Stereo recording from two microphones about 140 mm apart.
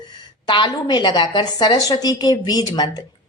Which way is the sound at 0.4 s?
35° left (ahead or behind).